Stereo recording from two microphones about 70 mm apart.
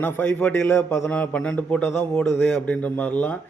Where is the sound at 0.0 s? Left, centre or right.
Left; by 2.6 s centre.